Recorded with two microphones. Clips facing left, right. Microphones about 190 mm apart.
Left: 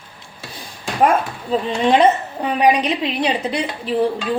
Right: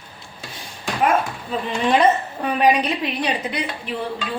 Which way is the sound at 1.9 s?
20° left (ahead or behind).